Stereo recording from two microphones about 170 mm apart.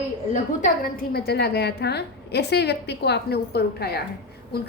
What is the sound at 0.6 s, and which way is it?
A woman's voice, 60° left (ahead or behind).